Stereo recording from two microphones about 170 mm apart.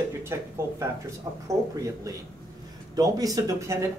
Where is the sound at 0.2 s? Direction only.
15° right (ahead or behind).